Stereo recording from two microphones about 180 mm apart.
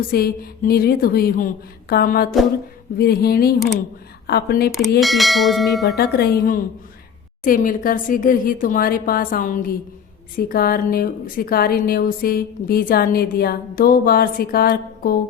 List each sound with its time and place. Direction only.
0.1 s a woman's voice: 55° left (ahead or behind)
4.9 s bell: centre (ahead or behind)
6.0 s a woman's voice: 60° left (ahead or behind)